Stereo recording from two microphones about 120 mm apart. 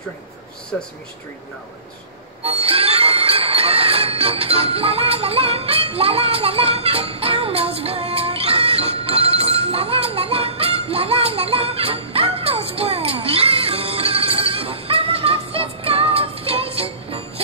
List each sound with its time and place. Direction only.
0.7 s speech: 10° left (ahead or behind)
2.4 s music: 55° right (ahead or behind)